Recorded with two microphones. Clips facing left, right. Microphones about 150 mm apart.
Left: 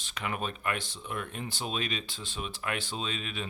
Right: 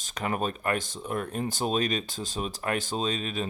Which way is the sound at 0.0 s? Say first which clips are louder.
Right 5 dB; 40° right (ahead or behind).